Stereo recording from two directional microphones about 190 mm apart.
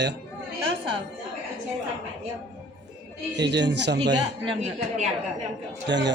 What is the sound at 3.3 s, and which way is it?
Speech, 65° right (ahead or behind).